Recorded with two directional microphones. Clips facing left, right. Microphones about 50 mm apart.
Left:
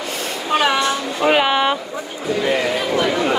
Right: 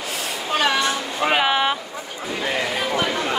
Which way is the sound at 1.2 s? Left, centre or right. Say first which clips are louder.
Left 3 dB; centre.